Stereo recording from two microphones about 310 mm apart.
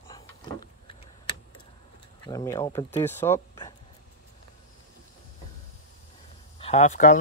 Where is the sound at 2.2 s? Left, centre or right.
Centre.